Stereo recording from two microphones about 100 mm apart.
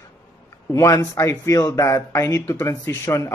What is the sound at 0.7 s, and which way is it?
Speech, 30° left (ahead or behind).